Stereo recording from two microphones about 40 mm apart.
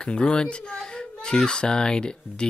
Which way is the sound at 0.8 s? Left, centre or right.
Centre.